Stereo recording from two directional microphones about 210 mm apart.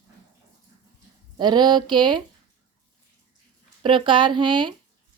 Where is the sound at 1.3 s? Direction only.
20° right (ahead or behind).